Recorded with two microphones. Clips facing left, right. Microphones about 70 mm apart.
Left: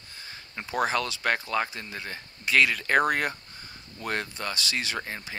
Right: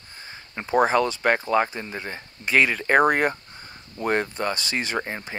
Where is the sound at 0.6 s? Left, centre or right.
Right.